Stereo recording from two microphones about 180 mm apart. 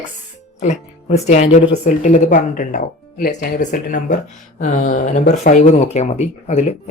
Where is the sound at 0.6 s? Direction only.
40° left (ahead or behind).